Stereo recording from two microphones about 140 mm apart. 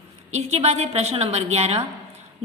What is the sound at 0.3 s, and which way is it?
A woman's voice, 50° right (ahead or behind).